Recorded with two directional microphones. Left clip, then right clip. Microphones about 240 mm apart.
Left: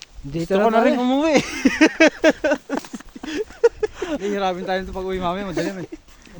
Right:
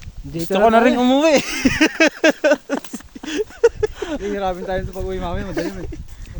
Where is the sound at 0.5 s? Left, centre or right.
Right.